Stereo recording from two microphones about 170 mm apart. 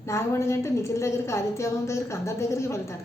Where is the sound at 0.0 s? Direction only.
15° left (ahead or behind).